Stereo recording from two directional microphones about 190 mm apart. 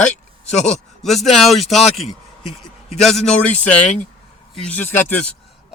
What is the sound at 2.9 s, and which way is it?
A man's voice, centre (ahead or behind).